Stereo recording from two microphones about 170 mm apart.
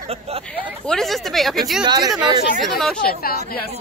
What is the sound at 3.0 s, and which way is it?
Speech, 60° left (ahead or behind).